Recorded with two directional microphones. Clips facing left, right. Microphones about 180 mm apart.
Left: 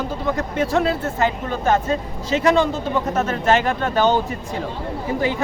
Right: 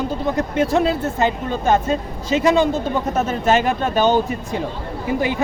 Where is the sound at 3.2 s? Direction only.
10° right (ahead or behind).